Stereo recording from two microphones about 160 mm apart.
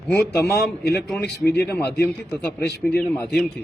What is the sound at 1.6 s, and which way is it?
A man's voice, 15° left (ahead or behind).